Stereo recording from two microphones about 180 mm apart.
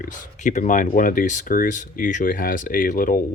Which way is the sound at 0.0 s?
40° left (ahead or behind).